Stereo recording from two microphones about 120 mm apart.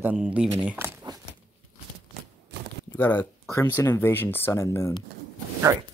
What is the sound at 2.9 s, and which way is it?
Speech, 15° left (ahead or behind).